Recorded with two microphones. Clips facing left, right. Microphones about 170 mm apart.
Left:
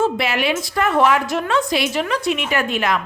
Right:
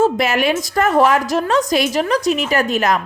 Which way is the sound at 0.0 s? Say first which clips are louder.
Right 4 dB; 45° right (ahead or behind).